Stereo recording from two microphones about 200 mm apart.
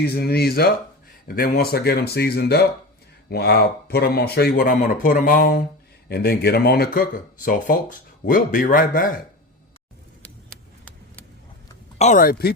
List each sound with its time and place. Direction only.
0.0 s speech: 55° left (ahead or behind)
11.9 s speech: 40° left (ahead or behind)